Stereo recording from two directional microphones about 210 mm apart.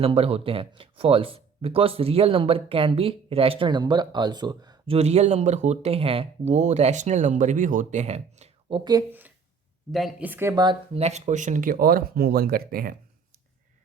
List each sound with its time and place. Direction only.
0.0 s speech: 25° right (ahead or behind)
4.9 s speech: 30° right (ahead or behind)
8.8 s speech: 15° right (ahead or behind); by 13.0 s 45° right (ahead or behind)